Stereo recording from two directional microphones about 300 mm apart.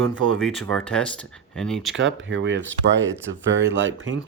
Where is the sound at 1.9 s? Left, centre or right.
Right.